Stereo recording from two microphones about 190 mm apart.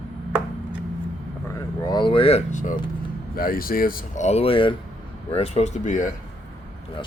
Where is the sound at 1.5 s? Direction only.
20° left (ahead or behind); by 2.8 s 40° left (ahead or behind).